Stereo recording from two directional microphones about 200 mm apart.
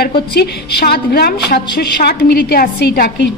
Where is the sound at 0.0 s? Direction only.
55° left (ahead or behind).